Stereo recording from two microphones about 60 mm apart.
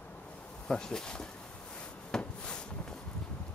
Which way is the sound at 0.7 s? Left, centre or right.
Centre.